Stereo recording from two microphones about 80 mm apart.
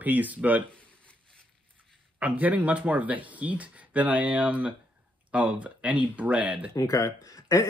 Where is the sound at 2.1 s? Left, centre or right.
Centre.